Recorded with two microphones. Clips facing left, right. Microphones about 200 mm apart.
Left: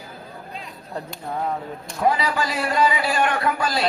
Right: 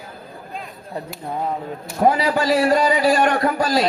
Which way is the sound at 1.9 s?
40° right (ahead or behind).